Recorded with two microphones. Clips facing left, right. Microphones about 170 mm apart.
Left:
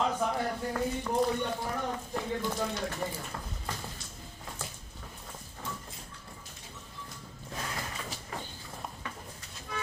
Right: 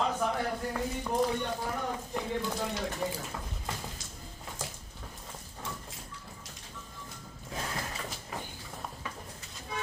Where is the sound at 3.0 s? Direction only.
5° right (ahead or behind).